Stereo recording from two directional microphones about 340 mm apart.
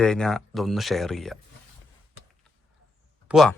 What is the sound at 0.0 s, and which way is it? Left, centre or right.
Speech, centre.